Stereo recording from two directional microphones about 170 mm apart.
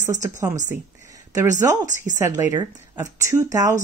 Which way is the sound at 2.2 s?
15° right (ahead or behind).